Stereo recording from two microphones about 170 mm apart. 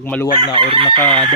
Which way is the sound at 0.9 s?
30° right (ahead or behind).